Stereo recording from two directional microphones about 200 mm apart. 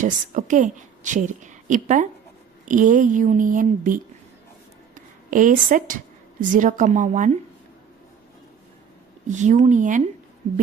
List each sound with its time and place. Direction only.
0.0 s a woman's voice: 40° right (ahead or behind)
9.3 s speech: 35° right (ahead or behind)